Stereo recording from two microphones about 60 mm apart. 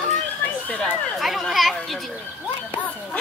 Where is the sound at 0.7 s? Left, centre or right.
Centre.